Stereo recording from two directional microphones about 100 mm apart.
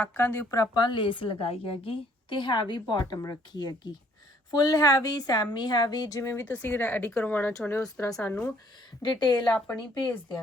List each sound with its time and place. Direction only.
0.0 s speech: 20° left (ahead or behind)
0.7 s a woman's voice: 50° left (ahead or behind); by 8.4 s 15° left (ahead or behind)
9.0 s a woman's voice: 45° left (ahead or behind)